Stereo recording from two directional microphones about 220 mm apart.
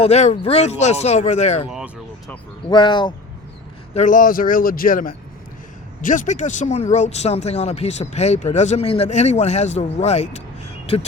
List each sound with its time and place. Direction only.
0.0 s speech: 30° left (ahead or behind)
1.6 s a sound: 5° right (ahead or behind)
2.6 s speech: 20° left (ahead or behind)
3.9 s speech: 35° left (ahead or behind)